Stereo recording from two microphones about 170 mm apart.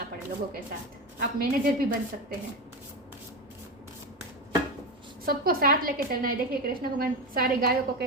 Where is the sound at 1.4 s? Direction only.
60° right (ahead or behind).